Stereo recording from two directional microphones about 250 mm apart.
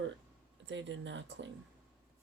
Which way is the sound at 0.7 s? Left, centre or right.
Right.